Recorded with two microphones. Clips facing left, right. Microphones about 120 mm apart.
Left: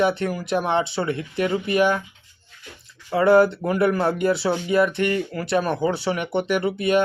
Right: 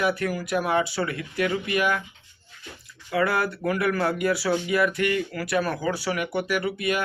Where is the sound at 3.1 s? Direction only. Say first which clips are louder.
Left 8 dB; 25° left (ahead or behind).